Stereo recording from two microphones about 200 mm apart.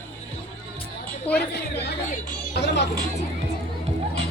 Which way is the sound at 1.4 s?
55° left (ahead or behind).